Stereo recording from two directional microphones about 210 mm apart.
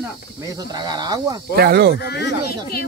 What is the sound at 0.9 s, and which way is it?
Speech, 20° right (ahead or behind).